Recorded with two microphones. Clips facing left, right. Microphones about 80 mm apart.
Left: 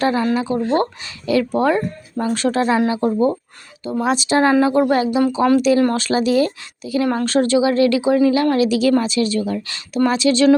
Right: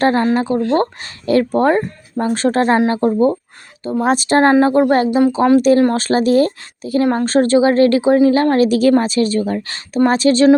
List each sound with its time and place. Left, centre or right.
0.0 s speech: right
0.3 s speech: right
2.8 s speech: right
4.0 s speech: right